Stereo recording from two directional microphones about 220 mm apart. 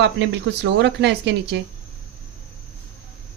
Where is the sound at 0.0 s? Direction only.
55° right (ahead or behind).